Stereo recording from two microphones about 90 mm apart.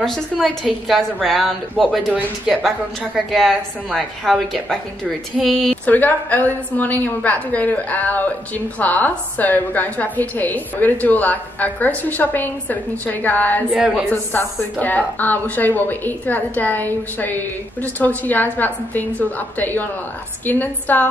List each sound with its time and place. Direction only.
0.0 s a woman's voice: 5° left (ahead or behind)
5.9 s a woman's voice: 20° left (ahead or behind)
13.7 s a woman's voice: 10° right (ahead or behind)
14.0 s a woman's voice: 20° left (ahead or behind)